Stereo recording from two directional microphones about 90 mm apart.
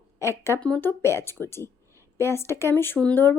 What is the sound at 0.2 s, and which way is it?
Speech, 30° left (ahead or behind).